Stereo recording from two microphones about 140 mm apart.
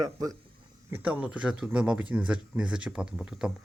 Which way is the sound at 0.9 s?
10° right (ahead or behind).